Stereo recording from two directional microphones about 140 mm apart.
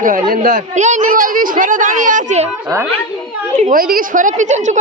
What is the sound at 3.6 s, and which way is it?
Speech, 80° right.